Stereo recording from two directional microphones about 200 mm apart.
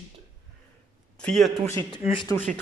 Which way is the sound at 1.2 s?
Centre (ahead or behind).